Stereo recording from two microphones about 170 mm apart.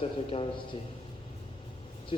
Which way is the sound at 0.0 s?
35° left (ahead or behind).